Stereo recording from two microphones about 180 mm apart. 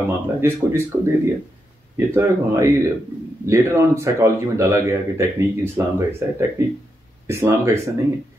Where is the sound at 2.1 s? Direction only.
15° right (ahead or behind).